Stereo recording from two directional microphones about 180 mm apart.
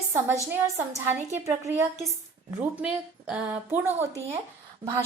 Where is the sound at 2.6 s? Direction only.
10° right (ahead or behind).